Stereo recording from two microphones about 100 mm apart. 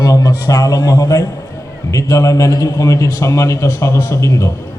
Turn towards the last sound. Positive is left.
turn(degrees=30)  # may be behind; listen again after turning